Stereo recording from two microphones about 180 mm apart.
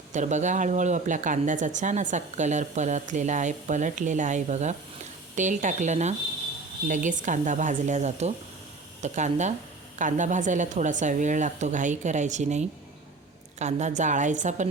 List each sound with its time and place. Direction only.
0.1 s speech: 40° right (ahead or behind)